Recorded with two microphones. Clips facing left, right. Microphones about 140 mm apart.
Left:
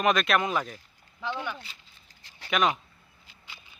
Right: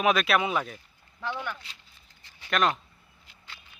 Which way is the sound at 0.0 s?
5° right (ahead or behind).